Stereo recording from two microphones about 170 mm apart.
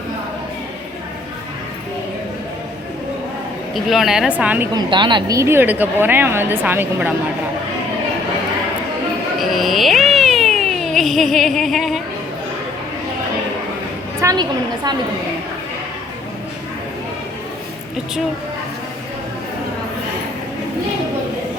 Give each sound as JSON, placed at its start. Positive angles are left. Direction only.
{"t": 3.8, "sound": "a woman's voice", "side_deg": 0}
{"t": 4.7, "sound": "a woman's voice", "side_deg": -25}
{"t": 9.4, "sound": "cat", "side_deg": 0}
{"t": 14.2, "sound": "a sound", "side_deg": -20}